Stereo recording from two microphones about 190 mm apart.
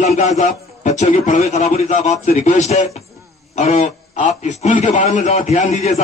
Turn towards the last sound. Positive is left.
turn(degrees=35)  # may be behind; listen again after turning